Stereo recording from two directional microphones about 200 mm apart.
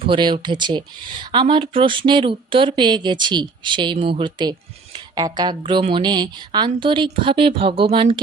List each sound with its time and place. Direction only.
0.0 s speech: 25° right (ahead or behind)